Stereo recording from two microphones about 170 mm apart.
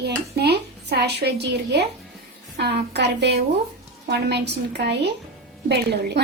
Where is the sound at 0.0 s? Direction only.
75° right (ahead or behind).